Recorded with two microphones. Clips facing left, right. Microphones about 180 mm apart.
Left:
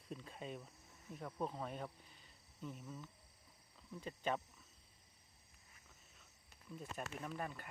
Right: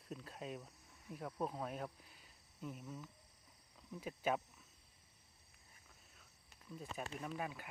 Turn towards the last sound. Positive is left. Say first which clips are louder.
# right 1 dB
turn(degrees=-5)  # may be behind; listen again after turning